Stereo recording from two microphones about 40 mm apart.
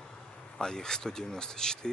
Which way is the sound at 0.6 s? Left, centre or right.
Centre.